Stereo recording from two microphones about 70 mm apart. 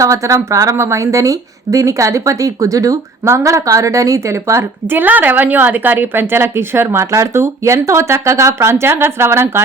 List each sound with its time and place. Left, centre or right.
0.0 s a woman's voice: right
4.9 s a woman's voice: right